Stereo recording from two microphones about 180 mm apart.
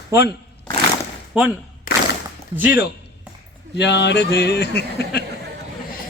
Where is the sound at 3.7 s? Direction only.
75° left (ahead or behind).